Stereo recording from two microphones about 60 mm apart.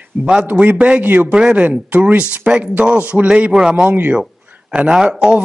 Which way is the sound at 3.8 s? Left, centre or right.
Right.